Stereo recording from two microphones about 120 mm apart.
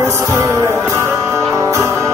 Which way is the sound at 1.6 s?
25° right (ahead or behind).